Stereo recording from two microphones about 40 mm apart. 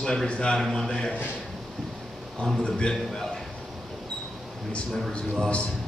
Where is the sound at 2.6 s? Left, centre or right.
Left.